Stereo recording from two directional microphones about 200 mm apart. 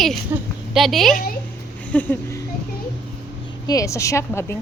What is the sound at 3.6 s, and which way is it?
Speech, 15° left (ahead or behind).